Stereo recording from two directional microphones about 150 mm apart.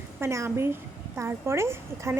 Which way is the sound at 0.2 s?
20° right (ahead or behind).